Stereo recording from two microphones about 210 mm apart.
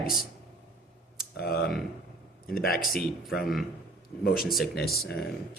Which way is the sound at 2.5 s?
45° left (ahead or behind).